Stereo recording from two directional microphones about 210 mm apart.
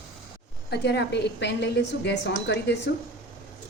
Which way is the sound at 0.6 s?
55° left (ahead or behind).